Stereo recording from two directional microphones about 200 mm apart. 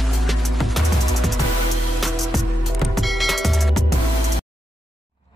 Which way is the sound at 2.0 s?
Centre (ahead or behind).